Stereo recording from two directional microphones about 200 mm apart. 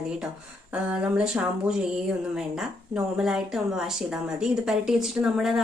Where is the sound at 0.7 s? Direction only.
5° right (ahead or behind).